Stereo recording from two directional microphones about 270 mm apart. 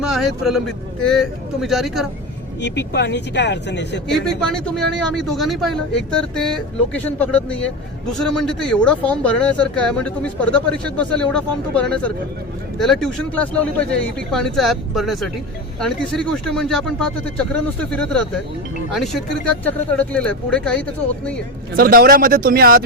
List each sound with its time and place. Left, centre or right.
0.0 s speech: centre
2.6 s speech: left
4.1 s speech: centre
21.8 s speech: right